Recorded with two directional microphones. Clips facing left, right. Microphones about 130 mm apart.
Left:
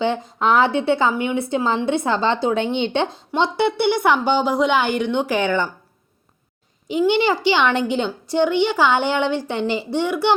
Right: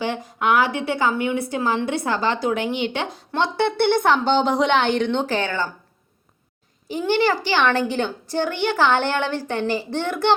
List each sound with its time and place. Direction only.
0.0 s a woman's voice: 25° left (ahead or behind)
6.8 s a woman's voice: 15° left (ahead or behind)